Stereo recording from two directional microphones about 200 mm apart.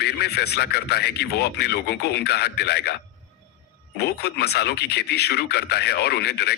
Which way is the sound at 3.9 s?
55° left (ahead or behind).